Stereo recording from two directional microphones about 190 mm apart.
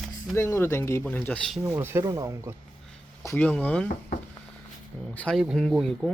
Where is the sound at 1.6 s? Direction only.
15° right (ahead or behind).